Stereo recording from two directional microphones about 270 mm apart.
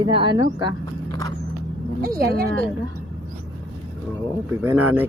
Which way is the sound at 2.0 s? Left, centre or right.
Right.